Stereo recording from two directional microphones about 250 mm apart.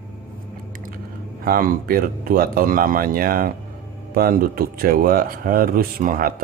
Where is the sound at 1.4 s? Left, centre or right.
Right.